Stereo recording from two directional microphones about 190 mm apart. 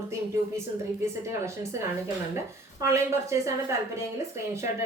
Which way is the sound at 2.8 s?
15° right (ahead or behind).